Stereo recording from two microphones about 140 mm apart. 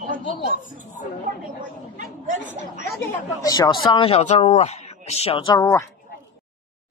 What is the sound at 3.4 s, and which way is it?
A man's voice, 30° left (ahead or behind).